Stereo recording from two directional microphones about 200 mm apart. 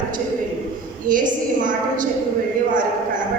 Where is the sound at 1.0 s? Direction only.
40° right (ahead or behind).